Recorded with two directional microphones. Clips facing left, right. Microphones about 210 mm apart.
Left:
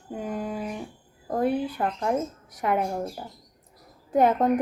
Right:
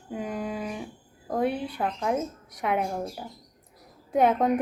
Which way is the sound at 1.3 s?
5° left (ahead or behind).